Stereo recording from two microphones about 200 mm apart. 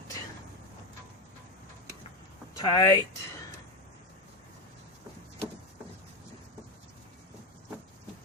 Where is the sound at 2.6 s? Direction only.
15° left (ahead or behind).